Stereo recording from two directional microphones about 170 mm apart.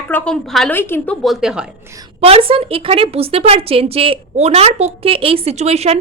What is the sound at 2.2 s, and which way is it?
Speech, 35° right (ahead or behind).